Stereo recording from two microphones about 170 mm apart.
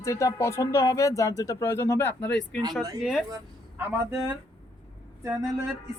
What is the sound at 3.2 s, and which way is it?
Speech, 15° right (ahead or behind).